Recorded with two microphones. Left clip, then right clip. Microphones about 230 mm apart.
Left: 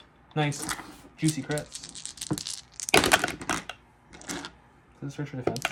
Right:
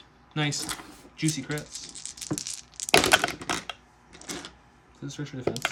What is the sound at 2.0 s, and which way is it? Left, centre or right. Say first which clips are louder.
Rattle: even; left.